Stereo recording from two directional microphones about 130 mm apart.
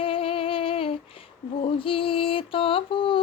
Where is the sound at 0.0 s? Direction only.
45° left (ahead or behind).